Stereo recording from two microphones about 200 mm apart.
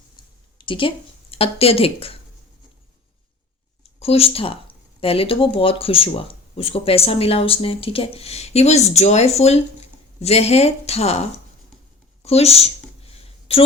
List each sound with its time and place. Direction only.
0.6 s speech: 25° left (ahead or behind)
4.0 s speech: 30° left (ahead or behind)
12.2 s a sound: 30° left (ahead or behind)